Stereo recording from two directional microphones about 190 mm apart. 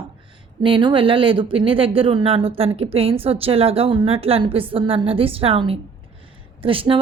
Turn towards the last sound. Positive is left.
turn(degrees=-30)  # may be behind; listen again after turning